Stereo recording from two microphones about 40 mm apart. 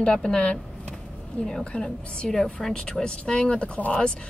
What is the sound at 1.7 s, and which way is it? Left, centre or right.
Speech, left.